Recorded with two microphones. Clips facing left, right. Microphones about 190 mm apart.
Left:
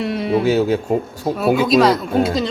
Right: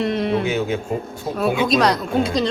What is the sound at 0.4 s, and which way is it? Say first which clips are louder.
Speech: left 6 dB; 35° left (ahead or behind).